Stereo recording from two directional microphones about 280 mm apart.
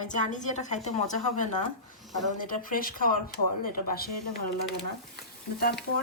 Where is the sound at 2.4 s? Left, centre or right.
Left.